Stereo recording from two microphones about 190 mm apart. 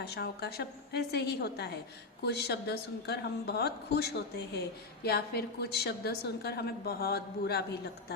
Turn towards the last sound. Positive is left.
turn(degrees=60)  # may be behind; listen again after turning